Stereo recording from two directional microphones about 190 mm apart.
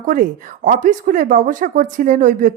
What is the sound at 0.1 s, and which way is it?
A woman's voice, 45° right (ahead or behind).